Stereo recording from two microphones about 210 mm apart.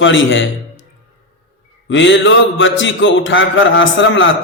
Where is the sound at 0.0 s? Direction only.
65° left (ahead or behind).